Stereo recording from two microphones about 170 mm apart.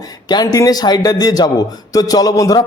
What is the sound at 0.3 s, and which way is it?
A man's voice, 25° left (ahead or behind).